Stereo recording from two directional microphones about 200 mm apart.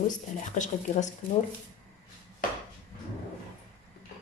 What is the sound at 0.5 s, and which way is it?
Speech, 35° left (ahead or behind).